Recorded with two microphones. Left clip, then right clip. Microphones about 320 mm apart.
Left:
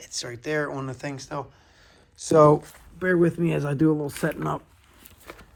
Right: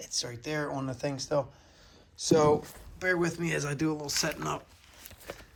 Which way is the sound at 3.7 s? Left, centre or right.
Centre.